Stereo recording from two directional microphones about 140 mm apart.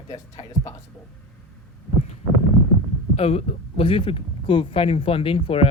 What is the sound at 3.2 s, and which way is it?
Speech, 45° left (ahead or behind).